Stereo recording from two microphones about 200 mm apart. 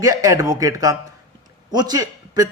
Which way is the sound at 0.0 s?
15° right (ahead or behind).